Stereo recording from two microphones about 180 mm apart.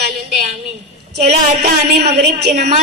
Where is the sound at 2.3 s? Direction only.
60° right (ahead or behind).